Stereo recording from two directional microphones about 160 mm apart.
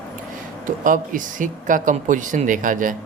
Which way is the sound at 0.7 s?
60° right (ahead or behind).